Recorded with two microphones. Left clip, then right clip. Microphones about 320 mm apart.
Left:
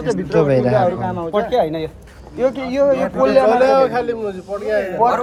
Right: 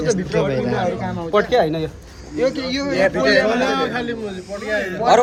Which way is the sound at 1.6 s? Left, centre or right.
Centre.